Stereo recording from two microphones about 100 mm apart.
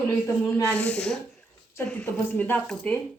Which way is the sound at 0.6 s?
10° left (ahead or behind).